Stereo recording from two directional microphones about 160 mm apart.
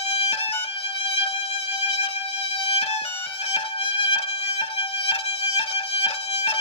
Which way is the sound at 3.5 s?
35° left (ahead or behind).